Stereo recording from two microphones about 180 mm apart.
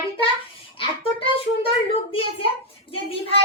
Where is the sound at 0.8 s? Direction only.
30° left (ahead or behind).